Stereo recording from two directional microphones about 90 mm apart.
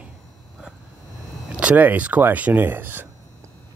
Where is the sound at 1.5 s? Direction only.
15° right (ahead or behind).